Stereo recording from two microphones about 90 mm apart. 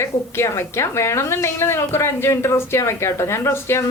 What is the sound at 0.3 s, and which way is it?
A woman's voice, 30° left (ahead or behind).